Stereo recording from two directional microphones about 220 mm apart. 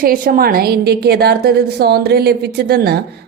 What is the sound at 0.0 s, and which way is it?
A woman's voice, 40° right (ahead or behind).